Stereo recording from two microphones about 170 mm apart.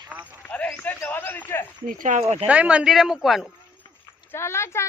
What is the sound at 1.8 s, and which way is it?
Speech, 50° right (ahead or behind).